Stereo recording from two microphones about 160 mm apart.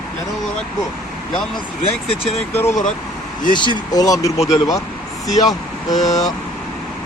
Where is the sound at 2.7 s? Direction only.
50° left (ahead or behind).